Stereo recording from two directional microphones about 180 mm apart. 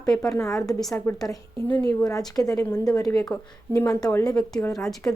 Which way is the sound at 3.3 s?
5° left (ahead or behind).